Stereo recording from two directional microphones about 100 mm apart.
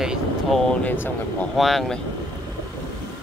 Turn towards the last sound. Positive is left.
turn(degrees=0)  # may be behind; listen again after turning